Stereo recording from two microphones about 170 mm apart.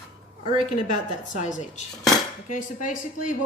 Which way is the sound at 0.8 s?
45° left (ahead or behind).